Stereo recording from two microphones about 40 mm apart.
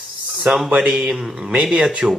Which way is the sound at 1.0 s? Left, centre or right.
Centre.